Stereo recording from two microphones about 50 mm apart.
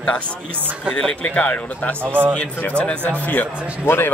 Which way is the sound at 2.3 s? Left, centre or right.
Left.